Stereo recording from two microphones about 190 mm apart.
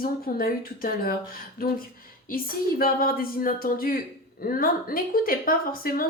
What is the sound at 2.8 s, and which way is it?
Speech, 50° left (ahead or behind).